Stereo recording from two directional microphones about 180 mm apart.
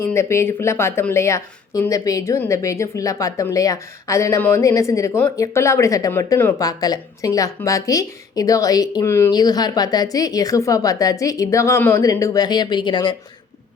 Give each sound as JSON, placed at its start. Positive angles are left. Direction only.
{"t": 0.1, "sound": "speech", "side_deg": 15}